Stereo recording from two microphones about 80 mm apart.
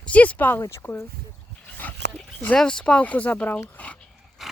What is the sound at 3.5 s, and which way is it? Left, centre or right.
Dog, centre.